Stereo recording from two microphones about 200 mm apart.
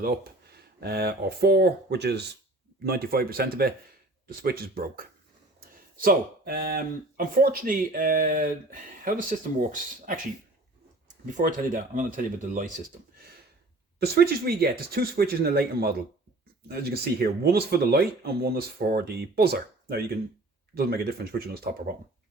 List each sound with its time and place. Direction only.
0.0 s speech: 50° right (ahead or behind)
11.3 s speech: 40° right (ahead or behind)